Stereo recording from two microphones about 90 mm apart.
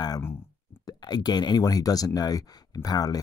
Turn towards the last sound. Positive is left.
turn(degrees=45)  # may be behind; listen again after turning